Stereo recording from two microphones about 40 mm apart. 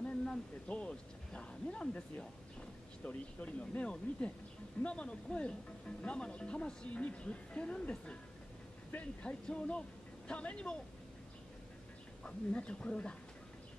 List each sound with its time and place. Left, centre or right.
0.0 s a sound: left
3.0 s speech: left
9.2 s speech: left
12.2 s speech: left